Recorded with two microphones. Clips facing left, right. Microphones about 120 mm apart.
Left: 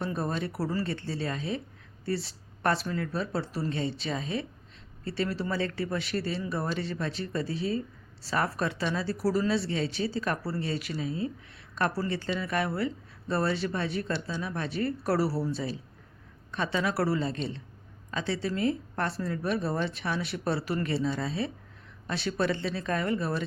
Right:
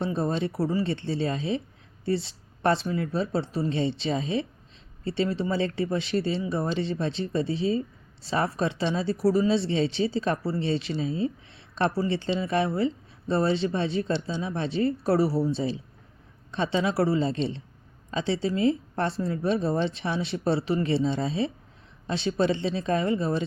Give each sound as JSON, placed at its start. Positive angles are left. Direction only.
{"t": 0.0, "sound": "speech", "side_deg": -25}